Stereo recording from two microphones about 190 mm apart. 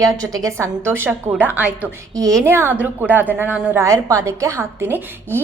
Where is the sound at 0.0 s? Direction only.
20° right (ahead or behind).